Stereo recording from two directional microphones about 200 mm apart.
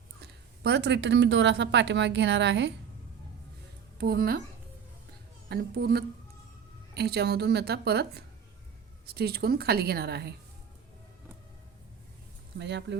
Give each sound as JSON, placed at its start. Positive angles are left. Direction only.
{"t": 0.2, "sound": "a woman's voice", "side_deg": -55}
{"t": 3.9, "sound": "speech", "side_deg": -50}
{"t": 5.5, "sound": "a woman's voice", "side_deg": -55}
{"t": 12.5, "sound": "a woman's voice", "side_deg": -60}